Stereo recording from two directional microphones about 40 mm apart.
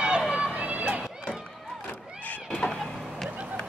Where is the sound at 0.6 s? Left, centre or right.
Right.